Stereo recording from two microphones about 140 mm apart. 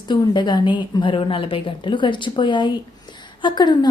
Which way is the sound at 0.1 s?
35° left (ahead or behind).